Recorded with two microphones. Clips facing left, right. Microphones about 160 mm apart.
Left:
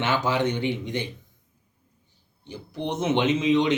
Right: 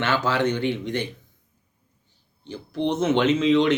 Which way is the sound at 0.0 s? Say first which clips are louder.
Right 1 dB; 15° left (ahead or behind).